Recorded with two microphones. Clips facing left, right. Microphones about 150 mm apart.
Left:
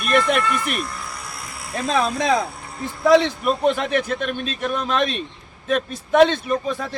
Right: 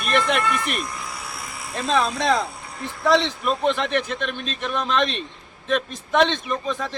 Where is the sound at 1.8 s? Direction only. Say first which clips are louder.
Left 1 dB; 10° left (ahead or behind).